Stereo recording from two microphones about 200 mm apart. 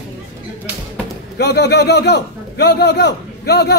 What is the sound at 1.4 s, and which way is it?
A woman's voice, 55° left (ahead or behind).